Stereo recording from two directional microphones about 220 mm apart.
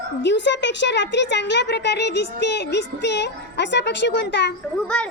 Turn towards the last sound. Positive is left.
turn(degrees=5)  # may be behind; listen again after turning